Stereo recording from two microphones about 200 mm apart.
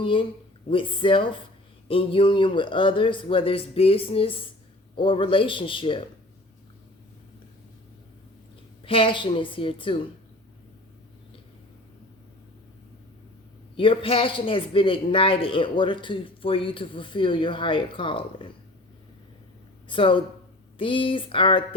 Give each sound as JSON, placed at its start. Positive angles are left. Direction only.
{"t": 0.0, "sound": "a man's voice", "side_deg": 25}
{"t": 8.8, "sound": "a man's voice", "side_deg": 25}
{"t": 13.7, "sound": "a man's voice", "side_deg": 25}
{"t": 19.9, "sound": "a man's voice", "side_deg": 25}